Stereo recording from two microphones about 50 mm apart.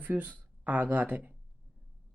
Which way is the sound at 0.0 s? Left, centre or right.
Right.